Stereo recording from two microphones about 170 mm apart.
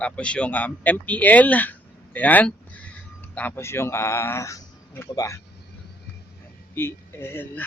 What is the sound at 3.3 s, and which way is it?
A man's voice, 15° left (ahead or behind).